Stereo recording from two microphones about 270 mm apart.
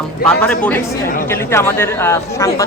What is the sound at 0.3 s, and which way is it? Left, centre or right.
A man's voice, centre.